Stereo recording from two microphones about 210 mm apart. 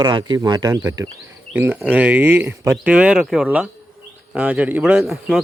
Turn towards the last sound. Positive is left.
turn(degrees=0)  # may be behind; listen again after turning